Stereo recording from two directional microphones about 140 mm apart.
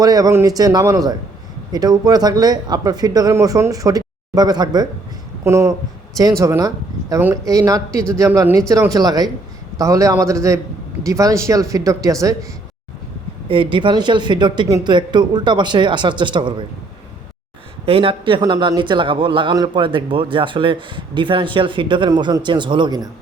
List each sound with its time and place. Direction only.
0.0 s speech: 25° right (ahead or behind)
13.5 s a man's voice: 35° right (ahead or behind)
17.8 s a man's voice: 40° right (ahead or behind)